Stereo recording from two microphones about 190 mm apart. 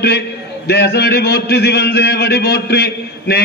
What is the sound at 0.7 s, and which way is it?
A man's voice, 60° left (ahead or behind).